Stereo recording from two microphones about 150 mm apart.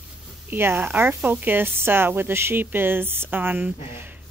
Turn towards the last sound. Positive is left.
turn(degrees=-10)  # may be behind; listen again after turning